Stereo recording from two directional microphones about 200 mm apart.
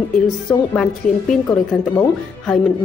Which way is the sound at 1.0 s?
40° left (ahead or behind).